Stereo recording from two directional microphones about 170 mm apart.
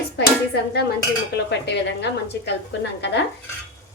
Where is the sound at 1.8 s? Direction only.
90° left.